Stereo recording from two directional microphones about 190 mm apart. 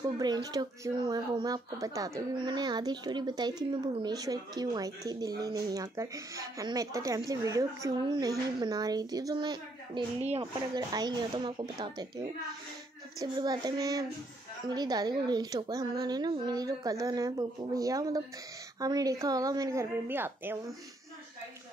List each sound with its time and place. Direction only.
0.0 s speech: 20° right (ahead or behind)
13.2 s a woman's voice: 20° right (ahead or behind)